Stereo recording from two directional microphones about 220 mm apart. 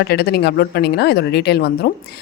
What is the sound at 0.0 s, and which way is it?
Speech, 45° left (ahead or behind).